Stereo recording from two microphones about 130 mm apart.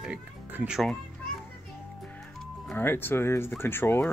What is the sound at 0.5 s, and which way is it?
Speech, 10° right (ahead or behind).